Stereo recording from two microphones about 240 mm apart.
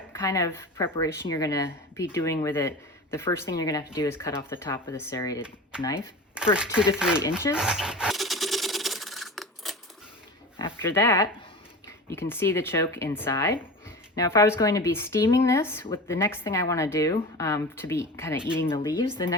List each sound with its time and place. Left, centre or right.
0.1 s speech: centre
6.6 s speech: centre
7.5 s dog: centre
10.6 s speech: centre